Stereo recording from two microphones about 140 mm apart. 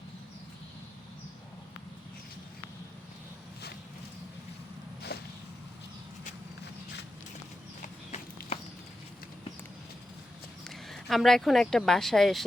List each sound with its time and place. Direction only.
7.8 s walk: 70° left (ahead or behind)
10.6 s speech: centre (ahead or behind)